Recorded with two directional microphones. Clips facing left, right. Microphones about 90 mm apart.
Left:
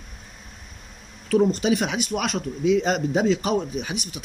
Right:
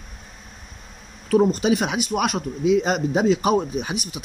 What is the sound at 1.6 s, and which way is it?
A man's voice, 20° right (ahead or behind).